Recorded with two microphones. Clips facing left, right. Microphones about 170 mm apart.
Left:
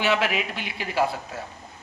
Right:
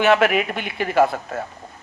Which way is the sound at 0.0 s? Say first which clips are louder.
Right 7 dB; 55° right (ahead or behind).